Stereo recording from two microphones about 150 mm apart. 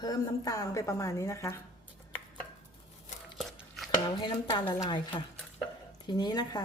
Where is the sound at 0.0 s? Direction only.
25° left (ahead or behind).